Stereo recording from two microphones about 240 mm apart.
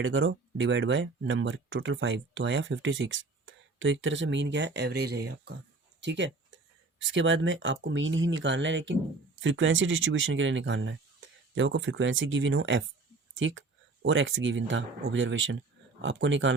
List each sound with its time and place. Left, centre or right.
0.0 s speech: right